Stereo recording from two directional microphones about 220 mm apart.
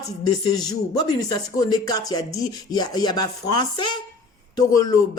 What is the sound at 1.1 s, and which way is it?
Speech, 15° left (ahead or behind).